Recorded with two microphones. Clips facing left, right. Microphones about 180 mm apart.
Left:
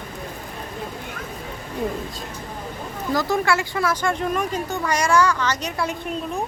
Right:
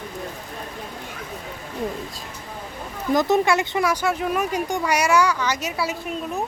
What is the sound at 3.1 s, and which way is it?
Speech, 20° right (ahead or behind).